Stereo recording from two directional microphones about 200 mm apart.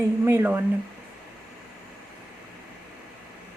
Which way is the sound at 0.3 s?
10° right (ahead or behind).